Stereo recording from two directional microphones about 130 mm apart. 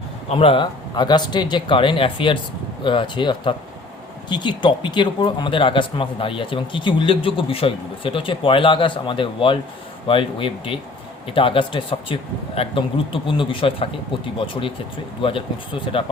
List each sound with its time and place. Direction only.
0.3 s a man's voice: 45° left (ahead or behind)